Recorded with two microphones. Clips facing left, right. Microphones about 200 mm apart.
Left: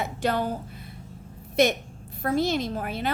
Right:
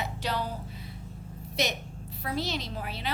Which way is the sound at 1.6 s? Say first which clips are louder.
Left 9 dB; 50° left (ahead or behind).